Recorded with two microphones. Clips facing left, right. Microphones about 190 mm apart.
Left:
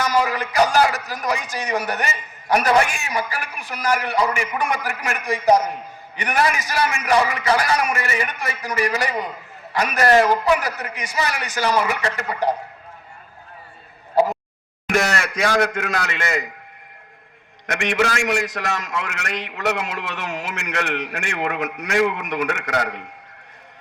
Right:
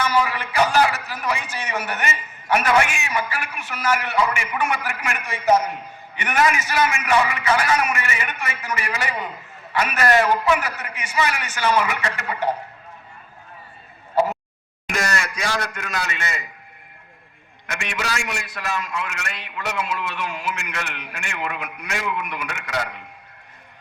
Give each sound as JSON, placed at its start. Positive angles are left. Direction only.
{"t": 0.0, "sound": "a man's voice", "side_deg": 40}
{"t": 14.8, "sound": "a man's voice", "side_deg": 60}
{"t": 17.7, "sound": "a man's voice", "side_deg": 75}